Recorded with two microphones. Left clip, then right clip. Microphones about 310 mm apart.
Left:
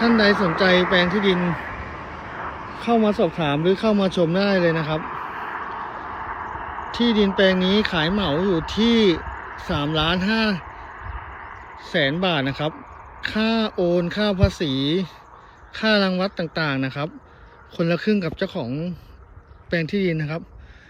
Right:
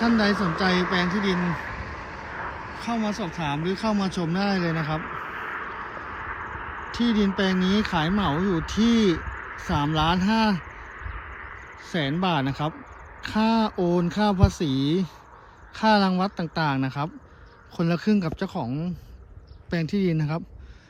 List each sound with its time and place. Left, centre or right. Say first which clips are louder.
0.6 s speech: left 7 dB; centre
1.0 s a sound: left 5 dB; left
2.8 s speech: left 10 dB; centre
5.0 s vehicle: left 3 dB; centre
7.0 s speech: left 7 dB; centre
9.2 s a sound: left 2 dB; centre
9.9 s speech: left 3 dB; centre
10.6 s a sound: left 3 dB; centre
11.9 s speech: left 5 dB; centre